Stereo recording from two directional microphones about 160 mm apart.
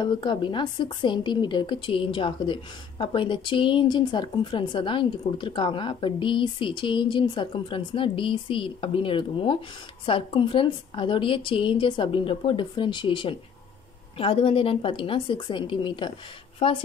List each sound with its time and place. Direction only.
0.0 s a woman's voice: 30° left (ahead or behind)